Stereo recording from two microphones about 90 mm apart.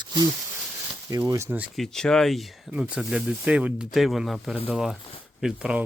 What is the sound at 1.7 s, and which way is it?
Speech, 5° left (ahead or behind).